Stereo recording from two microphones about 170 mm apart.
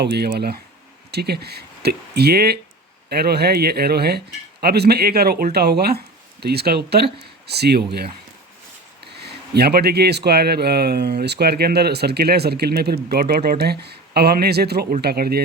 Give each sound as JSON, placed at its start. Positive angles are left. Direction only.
{"t": 0.0, "sound": "a man's voice", "side_deg": -75}
{"t": 9.1, "sound": "a man's voice", "side_deg": -70}